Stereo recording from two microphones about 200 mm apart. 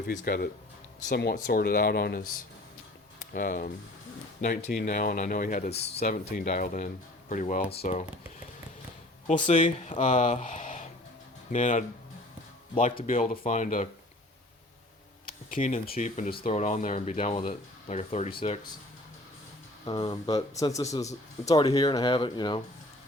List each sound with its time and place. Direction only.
0.1 s speech: 50° left (ahead or behind)
9.2 s speech: 40° left (ahead or behind)
13.1 s speech: 40° left (ahead or behind)
15.4 s speech: 40° left (ahead or behind)
19.8 s speech: 25° left (ahead or behind)